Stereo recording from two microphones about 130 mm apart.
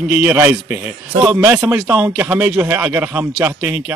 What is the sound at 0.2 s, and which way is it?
Speech, 10° right (ahead or behind).